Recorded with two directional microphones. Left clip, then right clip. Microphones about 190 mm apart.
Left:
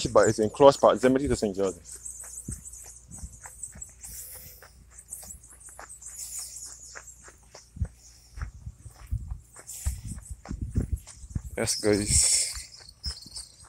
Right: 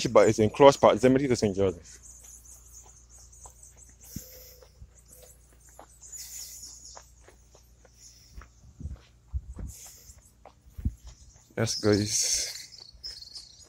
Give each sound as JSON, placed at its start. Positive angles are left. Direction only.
{"t": 0.0, "sound": "speech", "side_deg": -25}
{"t": 4.1, "sound": "a sound", "side_deg": -10}
{"t": 11.5, "sound": "speech", "side_deg": -15}
{"t": 12.1, "sound": "speech", "side_deg": -75}
{"t": 12.7, "sound": "cricket", "side_deg": 10}